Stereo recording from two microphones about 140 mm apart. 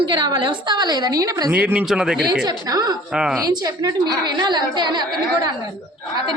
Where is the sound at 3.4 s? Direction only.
25° right (ahead or behind).